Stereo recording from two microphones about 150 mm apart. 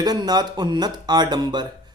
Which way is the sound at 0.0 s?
25° right (ahead or behind).